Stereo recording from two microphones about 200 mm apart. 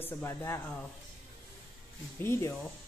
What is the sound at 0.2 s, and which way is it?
Speech, 15° left (ahead or behind).